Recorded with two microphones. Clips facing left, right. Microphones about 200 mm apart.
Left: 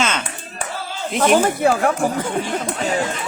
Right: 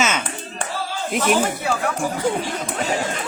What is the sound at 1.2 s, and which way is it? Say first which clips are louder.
Speech: left 6 dB; 50° left (ahead or behind).